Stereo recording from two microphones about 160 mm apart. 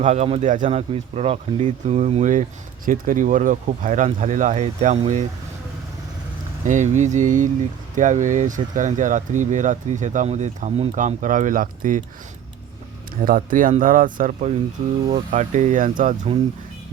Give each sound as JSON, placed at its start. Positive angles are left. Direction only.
{"t": 0.0, "sound": "speech", "side_deg": -45}
{"t": 2.8, "sound": "speech", "side_deg": -55}
{"t": 6.7, "sound": "speech", "side_deg": -50}
{"t": 13.2, "sound": "speech", "side_deg": -60}